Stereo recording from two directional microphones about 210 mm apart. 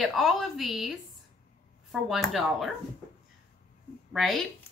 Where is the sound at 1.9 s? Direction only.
Centre (ahead or behind).